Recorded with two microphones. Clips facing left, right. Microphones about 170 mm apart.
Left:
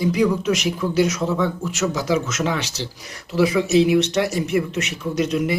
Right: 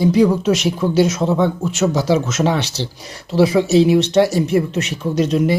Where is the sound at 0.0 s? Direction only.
30° right (ahead or behind).